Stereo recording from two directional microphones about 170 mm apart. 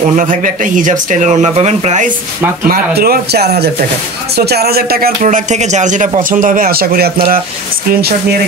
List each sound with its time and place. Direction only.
0.1 s speech: 50° right (ahead or behind)
3.0 s speech: 65° right (ahead or behind)